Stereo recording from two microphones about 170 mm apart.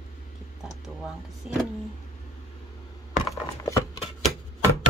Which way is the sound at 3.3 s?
20° left (ahead or behind).